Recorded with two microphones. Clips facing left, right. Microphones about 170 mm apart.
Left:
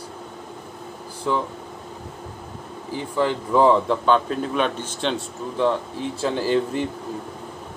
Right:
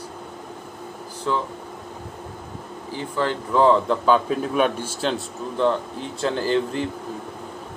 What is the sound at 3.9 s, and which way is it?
Speech, 5° right (ahead or behind).